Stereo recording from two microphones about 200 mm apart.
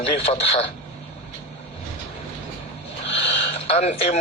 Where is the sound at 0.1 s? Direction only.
30° left (ahead or behind).